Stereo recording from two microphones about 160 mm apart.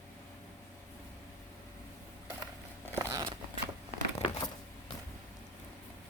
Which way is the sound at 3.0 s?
20° right (ahead or behind).